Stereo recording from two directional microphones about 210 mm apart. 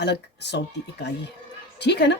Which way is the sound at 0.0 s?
55° left (ahead or behind).